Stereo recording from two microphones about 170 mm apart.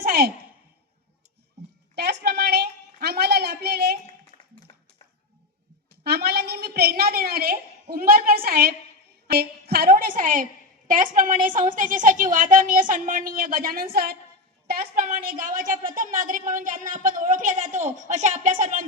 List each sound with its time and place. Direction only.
0.0 s sigh: 60° right (ahead or behind)
2.0 s a woman's voice: 75° right (ahead or behind)
6.1 s a woman's voice: 70° right (ahead or behind); by 18.9 s 50° right (ahead or behind)